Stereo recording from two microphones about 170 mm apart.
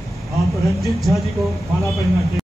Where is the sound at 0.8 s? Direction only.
Centre (ahead or behind).